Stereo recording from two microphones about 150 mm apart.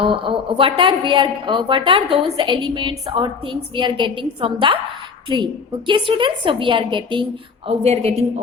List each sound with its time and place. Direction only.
0.0 s a woman's voice: 35° right (ahead or behind)
7.7 s a woman's voice: 45° right (ahead or behind)